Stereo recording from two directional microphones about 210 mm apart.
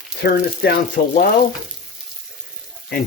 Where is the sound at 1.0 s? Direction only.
40° left (ahead or behind).